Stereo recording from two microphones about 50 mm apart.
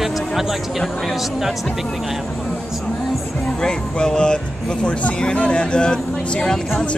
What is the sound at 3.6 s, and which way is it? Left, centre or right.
Speech, centre.